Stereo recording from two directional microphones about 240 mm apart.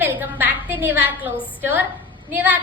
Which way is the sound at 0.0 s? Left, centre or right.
Centre.